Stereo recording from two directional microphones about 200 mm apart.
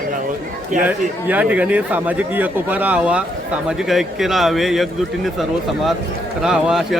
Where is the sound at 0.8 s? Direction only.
10° right (ahead or behind).